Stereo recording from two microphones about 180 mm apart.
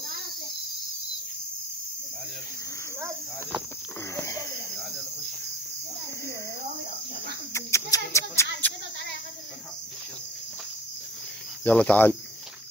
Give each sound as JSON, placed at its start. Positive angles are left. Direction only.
{"t": 4.1, "sound": "a sound", "side_deg": 15}
{"t": 7.5, "sound": "speech", "side_deg": 15}
{"t": 11.6, "sound": "speech", "side_deg": 5}